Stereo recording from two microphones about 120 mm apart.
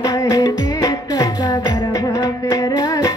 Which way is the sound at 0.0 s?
30° left (ahead or behind).